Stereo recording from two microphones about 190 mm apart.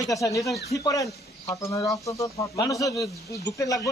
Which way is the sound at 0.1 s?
15° left (ahead or behind).